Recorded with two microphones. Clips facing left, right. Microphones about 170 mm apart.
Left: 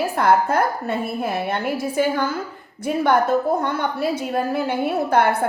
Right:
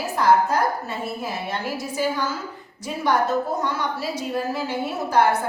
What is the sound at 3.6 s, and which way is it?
A woman's voice, 55° left (ahead or behind).